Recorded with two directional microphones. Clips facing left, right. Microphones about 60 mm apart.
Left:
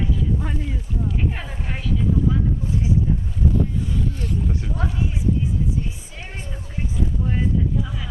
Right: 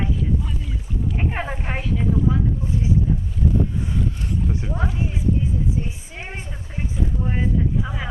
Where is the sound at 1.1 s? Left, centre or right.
Right.